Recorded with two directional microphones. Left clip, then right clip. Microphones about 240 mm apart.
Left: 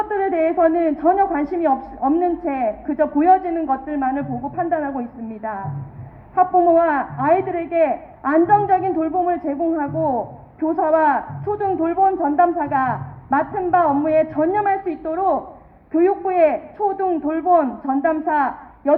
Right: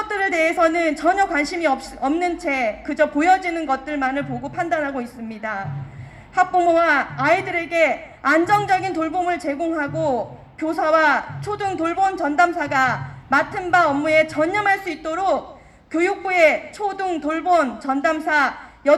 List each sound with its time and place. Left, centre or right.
0.1 s a woman's voice: right